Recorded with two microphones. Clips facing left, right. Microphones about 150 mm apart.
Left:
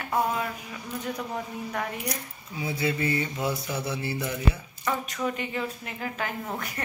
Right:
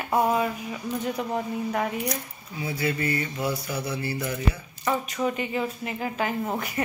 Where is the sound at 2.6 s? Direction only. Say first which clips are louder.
Even; 20° left (ahead or behind).